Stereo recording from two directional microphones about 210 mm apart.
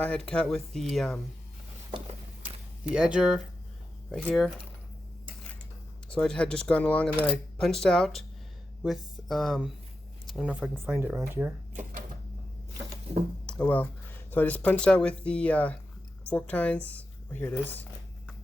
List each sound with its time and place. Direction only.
0.0 s speech: 5° left (ahead or behind)
1.9 s a sound: 25° right (ahead or behind)
2.9 s speech: 5° right (ahead or behind)
6.1 s speech: 5° left (ahead or behind)
11.7 s typewriter: 40° right (ahead or behind)
13.1 s speech: 30° right (ahead or behind)
13.4 s speech: 5° left (ahead or behind)